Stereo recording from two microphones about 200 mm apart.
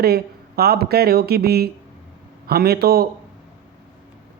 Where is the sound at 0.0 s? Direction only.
50° right (ahead or behind).